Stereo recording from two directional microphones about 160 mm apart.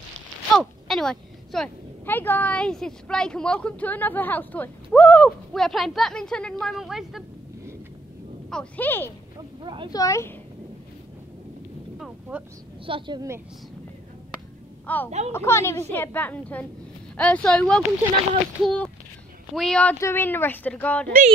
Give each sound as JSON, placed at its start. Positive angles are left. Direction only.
{"t": 0.6, "sound": "speech", "side_deg": 5}
{"t": 8.5, "sound": "speech", "side_deg": 5}
{"t": 9.6, "sound": "speech", "side_deg": -30}
{"t": 9.9, "sound": "speech", "side_deg": 20}
{"t": 12.0, "sound": "a sound", "side_deg": -10}
{"t": 12.8, "sound": "a woman's voice", "side_deg": -30}
{"t": 15.0, "sound": "speech", "side_deg": -45}
{"t": 15.3, "sound": "speech", "side_deg": 15}